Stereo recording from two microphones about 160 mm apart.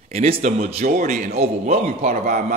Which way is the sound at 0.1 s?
40° right (ahead or behind).